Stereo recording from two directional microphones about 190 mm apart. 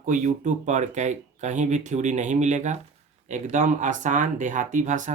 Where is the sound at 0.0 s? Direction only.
40° right (ahead or behind).